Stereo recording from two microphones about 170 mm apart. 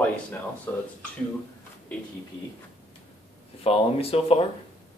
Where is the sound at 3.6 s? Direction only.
35° left (ahead or behind).